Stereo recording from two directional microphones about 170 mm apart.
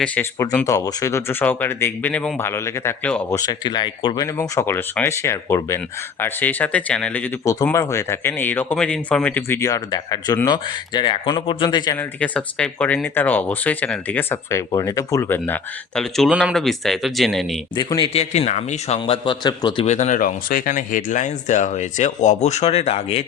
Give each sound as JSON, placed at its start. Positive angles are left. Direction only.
{"t": 0.0, "sound": "speech", "side_deg": 10}
{"t": 3.3, "sound": "speech", "side_deg": 25}
{"t": 11.9, "sound": "speech", "side_deg": 10}
{"t": 17.7, "sound": "speech", "side_deg": 25}
{"t": 18.1, "sound": "speech", "side_deg": 40}
{"t": 18.9, "sound": "speech", "side_deg": 30}
{"t": 19.8, "sound": "speech", "side_deg": 45}